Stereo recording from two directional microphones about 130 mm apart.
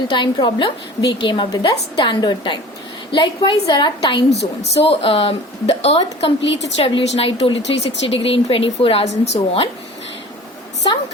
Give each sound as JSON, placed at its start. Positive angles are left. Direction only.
{"t": 0.1, "sound": "a woman's voice", "side_deg": 35}
{"t": 4.8, "sound": "a woman's voice", "side_deg": 45}
{"t": 10.8, "sound": "a woman's voice", "side_deg": 40}